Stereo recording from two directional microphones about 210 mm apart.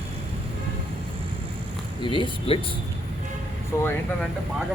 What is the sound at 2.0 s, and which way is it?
Speech, 25° left (ahead or behind).